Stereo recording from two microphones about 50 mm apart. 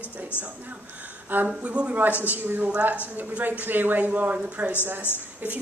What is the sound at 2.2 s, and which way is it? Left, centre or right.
A woman's voice, right.